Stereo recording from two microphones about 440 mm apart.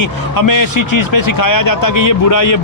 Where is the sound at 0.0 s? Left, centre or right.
Left.